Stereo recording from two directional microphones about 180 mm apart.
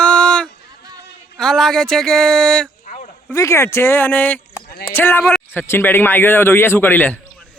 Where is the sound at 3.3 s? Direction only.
15° left (ahead or behind).